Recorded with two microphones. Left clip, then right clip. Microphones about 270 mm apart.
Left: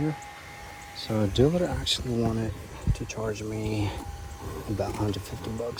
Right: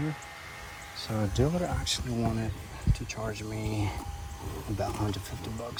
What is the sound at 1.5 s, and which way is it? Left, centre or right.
Speech, right.